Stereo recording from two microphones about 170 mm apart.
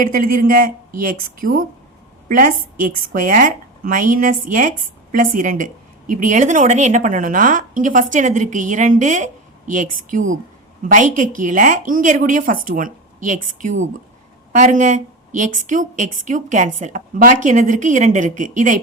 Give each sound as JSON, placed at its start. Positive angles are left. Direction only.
{"t": 0.0, "sound": "a woman's voice", "side_deg": -55}